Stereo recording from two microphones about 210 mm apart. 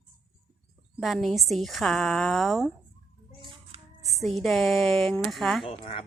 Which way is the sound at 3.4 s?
25° right (ahead or behind).